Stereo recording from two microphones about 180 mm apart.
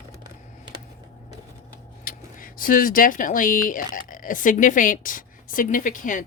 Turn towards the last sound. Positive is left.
turn(degrees=45)  # may be behind; listen again after turning